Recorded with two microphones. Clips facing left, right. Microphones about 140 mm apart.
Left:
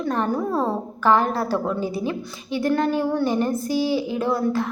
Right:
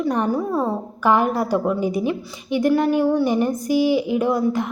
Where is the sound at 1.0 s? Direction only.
15° right (ahead or behind).